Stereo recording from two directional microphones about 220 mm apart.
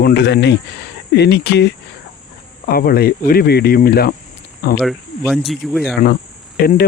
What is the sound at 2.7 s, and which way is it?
Speech, 45° left (ahead or behind).